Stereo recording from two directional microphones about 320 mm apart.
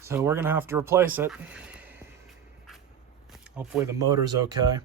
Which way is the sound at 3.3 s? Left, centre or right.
Centre.